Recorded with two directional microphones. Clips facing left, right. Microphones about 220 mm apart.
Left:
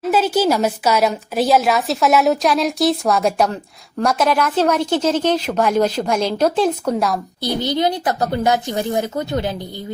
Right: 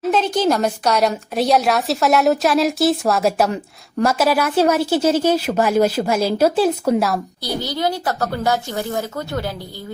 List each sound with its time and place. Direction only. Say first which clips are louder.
0.1 s a woman's voice: left 1 dB; 5° left (ahead or behind)
7.4 s speech: left 4 dB; 20° left (ahead or behind)